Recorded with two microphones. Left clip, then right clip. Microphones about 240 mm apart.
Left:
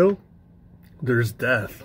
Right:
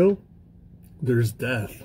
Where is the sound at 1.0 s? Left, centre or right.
Centre.